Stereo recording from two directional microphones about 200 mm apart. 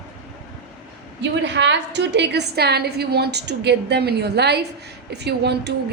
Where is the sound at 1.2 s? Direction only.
60° right (ahead or behind).